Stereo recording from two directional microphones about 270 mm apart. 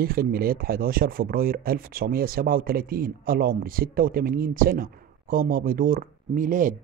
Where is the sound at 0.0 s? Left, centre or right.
Right.